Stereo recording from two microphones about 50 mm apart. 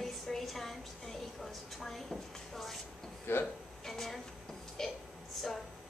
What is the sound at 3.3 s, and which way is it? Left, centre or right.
Speech, left.